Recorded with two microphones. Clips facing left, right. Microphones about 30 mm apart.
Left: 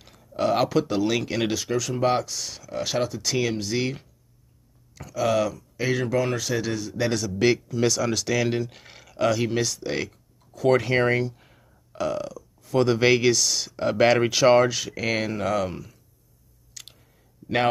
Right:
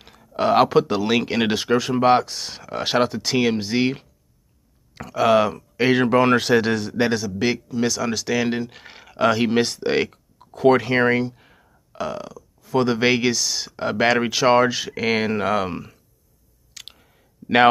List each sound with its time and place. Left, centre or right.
0.0 s speech: right
7.1 s speech: centre; by 10.7 s right
10.7 s speech: centre; by 15.8 s right
16.8 s chewing: right